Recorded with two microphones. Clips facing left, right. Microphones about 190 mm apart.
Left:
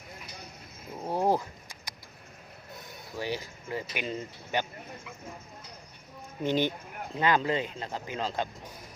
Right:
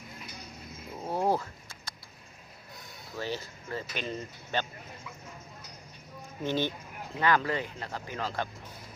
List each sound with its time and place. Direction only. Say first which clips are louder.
1.0 s a sound: left 2 dB; 15° left (ahead or behind)
3.2 s speech: left 1 dB; 15° left (ahead or behind)
6.4 s speech: left 3 dB; 15° left (ahead or behind)